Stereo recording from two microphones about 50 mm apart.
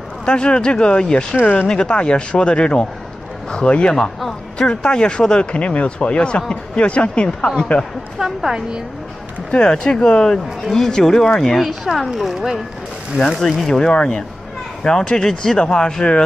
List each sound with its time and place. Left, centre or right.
0.2 s speech: centre
1.3 s speech: left
1.7 s speech: centre
3.9 s speech: centre
8.2 s a woman's voice: centre
9.5 s speech: centre
11.6 s speech: centre
13.7 s speech: centre